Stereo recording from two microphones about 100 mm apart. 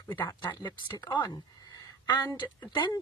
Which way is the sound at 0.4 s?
45° left (ahead or behind).